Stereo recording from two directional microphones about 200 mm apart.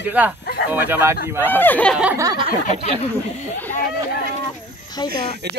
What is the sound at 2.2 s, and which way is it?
Speech, 20° right (ahead or behind).